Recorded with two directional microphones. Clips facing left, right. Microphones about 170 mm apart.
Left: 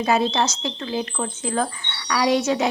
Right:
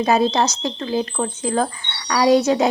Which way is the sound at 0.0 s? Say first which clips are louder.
Right 3 dB; 40° right (ahead or behind).